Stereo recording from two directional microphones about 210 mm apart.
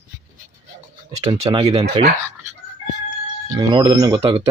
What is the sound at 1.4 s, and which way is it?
Speech, 20° right (ahead or behind).